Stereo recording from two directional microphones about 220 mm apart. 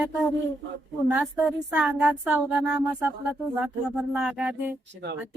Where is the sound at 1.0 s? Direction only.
5° right (ahead or behind).